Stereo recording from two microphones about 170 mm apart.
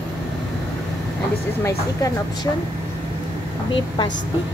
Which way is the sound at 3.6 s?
25° left (ahead or behind).